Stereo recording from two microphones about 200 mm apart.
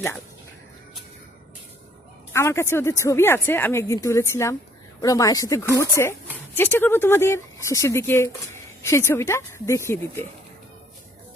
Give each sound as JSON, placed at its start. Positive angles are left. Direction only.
{"t": 2.3, "sound": "speech", "side_deg": 15}